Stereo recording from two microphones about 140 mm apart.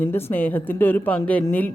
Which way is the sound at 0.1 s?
15° left (ahead or behind).